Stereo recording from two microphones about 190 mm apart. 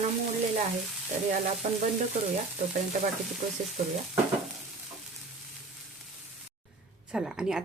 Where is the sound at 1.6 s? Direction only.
40° right (ahead or behind).